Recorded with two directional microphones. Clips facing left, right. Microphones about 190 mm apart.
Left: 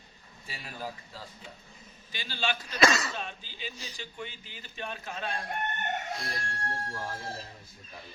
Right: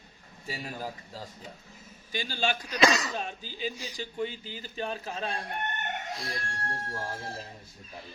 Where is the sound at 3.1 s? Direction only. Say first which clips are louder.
Right 4 dB; 40° right (ahead or behind).